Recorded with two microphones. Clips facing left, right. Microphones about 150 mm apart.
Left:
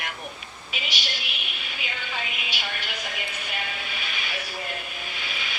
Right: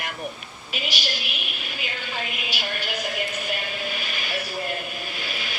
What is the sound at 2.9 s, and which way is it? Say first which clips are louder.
Music: right 6 dB; 45° right (ahead or behind).